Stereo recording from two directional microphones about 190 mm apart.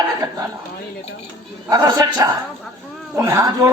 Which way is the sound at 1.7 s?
20° right (ahead or behind).